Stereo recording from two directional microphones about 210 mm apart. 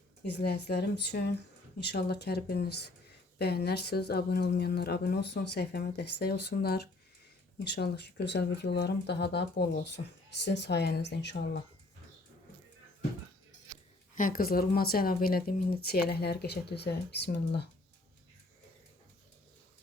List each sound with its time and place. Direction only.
0.3 s speech: 50° left (ahead or behind)
14.2 s speech: 40° left (ahead or behind)